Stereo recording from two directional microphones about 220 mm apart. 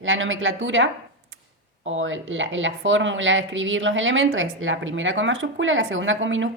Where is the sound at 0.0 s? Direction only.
60° right (ahead or behind).